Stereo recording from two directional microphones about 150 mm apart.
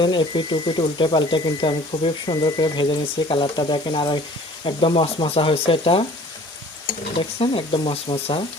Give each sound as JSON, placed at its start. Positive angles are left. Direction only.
{"t": 0.0, "sound": "speech", "side_deg": 30}
{"t": 7.2, "sound": "speech", "side_deg": 40}